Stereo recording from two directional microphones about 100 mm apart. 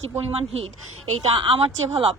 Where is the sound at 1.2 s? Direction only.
65° right (ahead or behind).